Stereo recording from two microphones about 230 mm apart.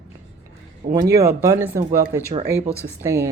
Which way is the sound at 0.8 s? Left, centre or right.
Centre.